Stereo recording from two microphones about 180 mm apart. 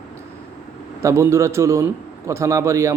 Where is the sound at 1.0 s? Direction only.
15° right (ahead or behind).